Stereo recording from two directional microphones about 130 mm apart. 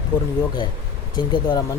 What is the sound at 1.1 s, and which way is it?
Speech, 35° left (ahead or behind).